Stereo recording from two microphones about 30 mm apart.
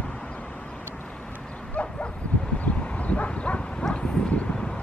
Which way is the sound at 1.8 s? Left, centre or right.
Left.